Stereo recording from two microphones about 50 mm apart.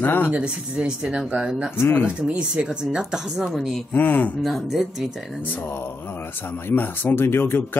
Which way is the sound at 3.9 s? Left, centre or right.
Left.